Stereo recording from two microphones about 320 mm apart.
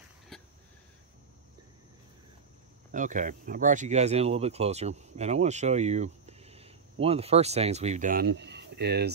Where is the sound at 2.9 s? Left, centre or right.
Right.